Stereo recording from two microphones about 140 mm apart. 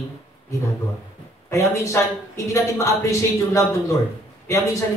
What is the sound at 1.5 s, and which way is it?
Speech, 20° left (ahead or behind).